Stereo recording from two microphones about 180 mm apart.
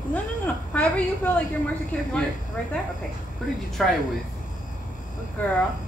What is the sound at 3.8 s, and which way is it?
Speech, centre (ahead or behind).